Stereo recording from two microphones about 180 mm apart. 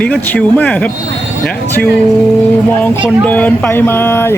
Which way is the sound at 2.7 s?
10° left (ahead or behind).